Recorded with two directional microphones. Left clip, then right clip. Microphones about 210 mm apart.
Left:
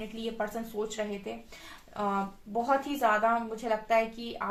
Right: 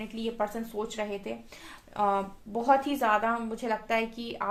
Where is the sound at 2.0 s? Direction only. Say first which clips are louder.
Right 4 dB; 50° right (ahead or behind).